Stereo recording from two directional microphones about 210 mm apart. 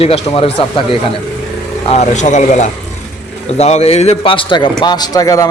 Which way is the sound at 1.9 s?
35° left (ahead or behind).